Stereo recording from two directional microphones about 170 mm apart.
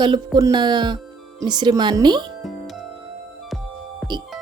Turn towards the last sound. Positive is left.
turn(degrees=0)  # may be behind; listen again after turning